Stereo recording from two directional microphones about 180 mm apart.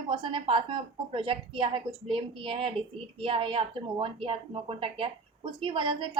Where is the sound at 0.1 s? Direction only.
25° right (ahead or behind).